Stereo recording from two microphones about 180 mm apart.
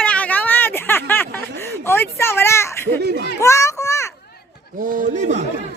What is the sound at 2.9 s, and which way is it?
Speech, 65° right (ahead or behind).